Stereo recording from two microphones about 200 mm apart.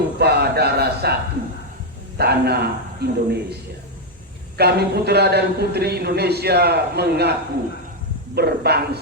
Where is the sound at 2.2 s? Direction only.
55° right (ahead or behind).